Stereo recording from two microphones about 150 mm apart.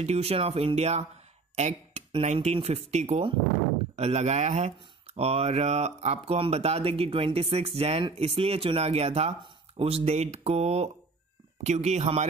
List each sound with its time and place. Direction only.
0.0 s speech: 45° right (ahead or behind)